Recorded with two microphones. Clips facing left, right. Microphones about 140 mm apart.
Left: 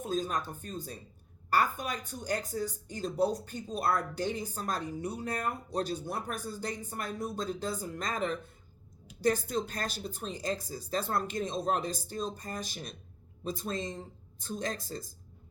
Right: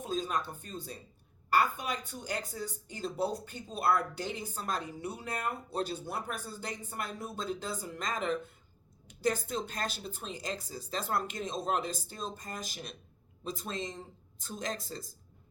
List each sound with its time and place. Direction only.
0.0 s speech: 45° left (ahead or behind)
13.7 s a woman's voice: 40° left (ahead or behind)